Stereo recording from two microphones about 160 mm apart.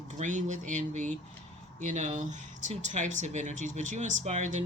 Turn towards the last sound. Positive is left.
turn(degrees=-50)  # may be behind; listen again after turning